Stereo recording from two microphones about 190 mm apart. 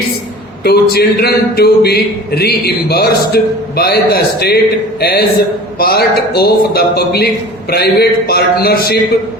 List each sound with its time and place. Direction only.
0.6 s a man's voice: 55° left (ahead or behind)